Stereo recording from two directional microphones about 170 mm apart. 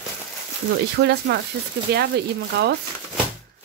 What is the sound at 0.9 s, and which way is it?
Speech, 80° right.